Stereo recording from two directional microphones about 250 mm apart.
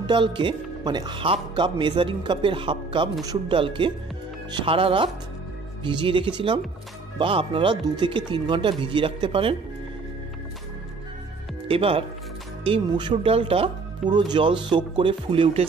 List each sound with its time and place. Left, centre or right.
0.0 s speech: centre
11.6 s speech: right